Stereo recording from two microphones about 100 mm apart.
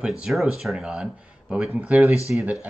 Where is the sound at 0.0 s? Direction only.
10° right (ahead or behind).